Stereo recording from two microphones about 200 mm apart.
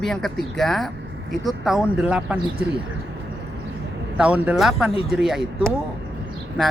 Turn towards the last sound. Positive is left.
turn(degrees=0)  # may be behind; listen again after turning